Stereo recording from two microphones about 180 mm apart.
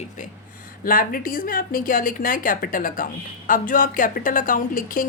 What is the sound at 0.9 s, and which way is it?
Speech, 50° left (ahead or behind).